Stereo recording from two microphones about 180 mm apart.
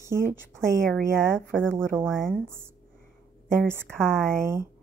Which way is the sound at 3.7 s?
15° right (ahead or behind).